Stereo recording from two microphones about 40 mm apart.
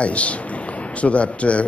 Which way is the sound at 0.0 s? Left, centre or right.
Left.